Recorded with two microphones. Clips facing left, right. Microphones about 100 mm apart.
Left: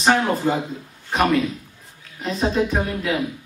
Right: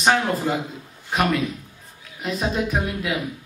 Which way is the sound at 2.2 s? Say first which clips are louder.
Left 3 dB; 30° left (ahead or behind).